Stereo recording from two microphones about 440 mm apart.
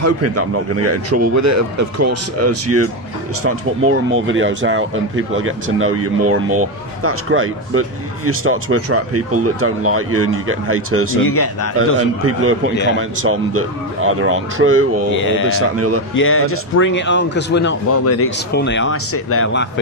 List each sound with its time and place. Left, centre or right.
0.0 s speech: right
11.3 s a man's voice: left
11.8 s speech: right
12.7 s speech: left
13.2 s speech: right
15.1 s speech: left